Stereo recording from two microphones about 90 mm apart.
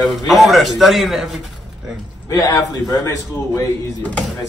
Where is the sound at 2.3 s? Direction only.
40° left (ahead or behind).